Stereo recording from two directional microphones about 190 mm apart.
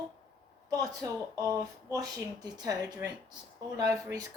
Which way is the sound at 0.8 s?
20° right (ahead or behind).